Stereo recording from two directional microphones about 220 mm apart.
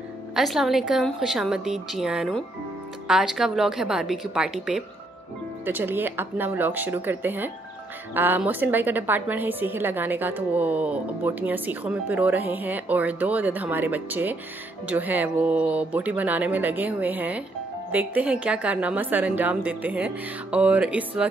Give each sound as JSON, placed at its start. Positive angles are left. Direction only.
{"t": 0.4, "sound": "a woman's voice", "side_deg": 0}